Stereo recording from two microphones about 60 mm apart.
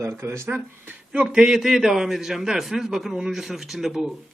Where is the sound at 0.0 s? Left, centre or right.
Right.